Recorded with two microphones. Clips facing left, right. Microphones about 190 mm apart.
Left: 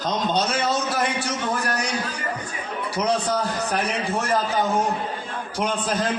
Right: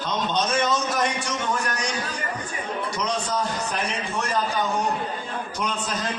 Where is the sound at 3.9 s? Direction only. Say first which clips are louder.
Left 4 dB; 55° left (ahead or behind).